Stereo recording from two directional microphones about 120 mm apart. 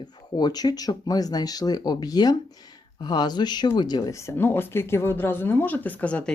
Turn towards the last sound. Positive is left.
turn(degrees=10)  # may be behind; listen again after turning